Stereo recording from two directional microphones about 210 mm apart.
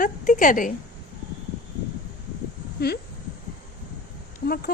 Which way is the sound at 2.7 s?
50° left (ahead or behind).